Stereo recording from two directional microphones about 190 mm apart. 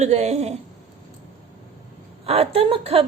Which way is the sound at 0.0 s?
35° right (ahead or behind).